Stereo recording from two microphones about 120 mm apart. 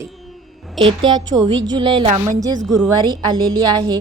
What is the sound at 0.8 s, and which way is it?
A woman's voice, 45° right (ahead or behind).